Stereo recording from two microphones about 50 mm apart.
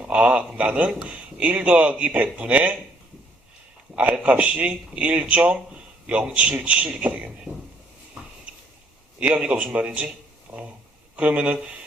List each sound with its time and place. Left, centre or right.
0.0 s speech: right
4.2 s speech: right
9.2 s speech: right